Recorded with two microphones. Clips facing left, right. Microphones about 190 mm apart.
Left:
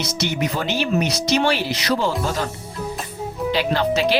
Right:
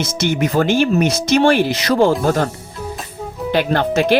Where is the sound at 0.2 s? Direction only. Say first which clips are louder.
Right 8 dB; 50° right (ahead or behind).